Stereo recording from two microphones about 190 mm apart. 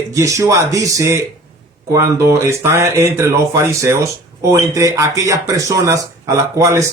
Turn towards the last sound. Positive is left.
turn(degrees=-15)  # may be behind; listen again after turning